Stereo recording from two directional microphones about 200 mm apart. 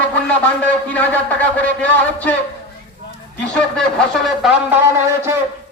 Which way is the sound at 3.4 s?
5° left (ahead or behind).